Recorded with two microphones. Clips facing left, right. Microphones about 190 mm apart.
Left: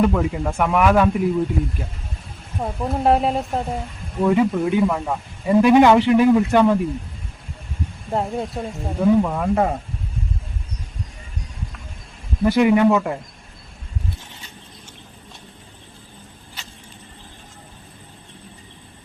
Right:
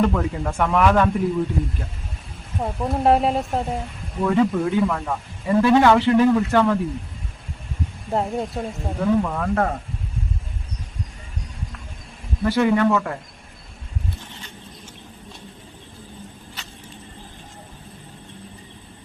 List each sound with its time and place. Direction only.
0.0 s speech: 10° left (ahead or behind)
2.6 s speech: centre (ahead or behind)
4.2 s speech: 15° left (ahead or behind)
8.1 s speech: centre (ahead or behind)
9.0 s speech: 10° left (ahead or behind)
12.5 s speech: 15° left (ahead or behind)